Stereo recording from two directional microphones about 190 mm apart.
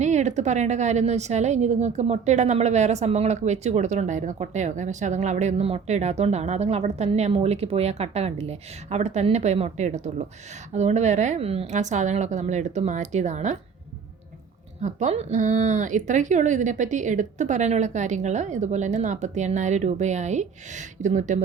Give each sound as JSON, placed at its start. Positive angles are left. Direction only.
{"t": 0.0, "sound": "a woman's voice", "side_deg": -40}
{"t": 14.8, "sound": "a woman's voice", "side_deg": -40}